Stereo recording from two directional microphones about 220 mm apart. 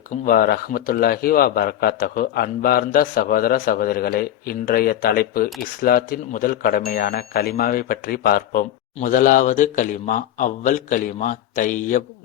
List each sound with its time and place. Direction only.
0.3 s speech: 40° left (ahead or behind)